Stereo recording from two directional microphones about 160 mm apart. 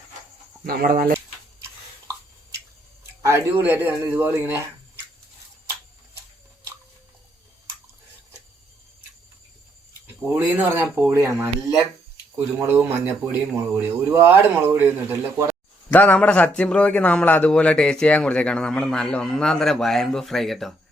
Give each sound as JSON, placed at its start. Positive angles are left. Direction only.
{"t": 0.6, "sound": "speech", "side_deg": -65}
{"t": 3.2, "sound": "a man's voice", "side_deg": -15}
{"t": 10.2, "sound": "a man's voice", "side_deg": -15}
{"t": 15.9, "sound": "a man's voice", "side_deg": 10}